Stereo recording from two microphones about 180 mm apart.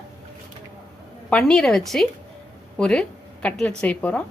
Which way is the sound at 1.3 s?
5° left (ahead or behind).